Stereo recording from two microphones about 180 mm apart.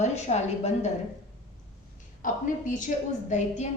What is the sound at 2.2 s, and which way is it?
Speech, 45° left (ahead or behind).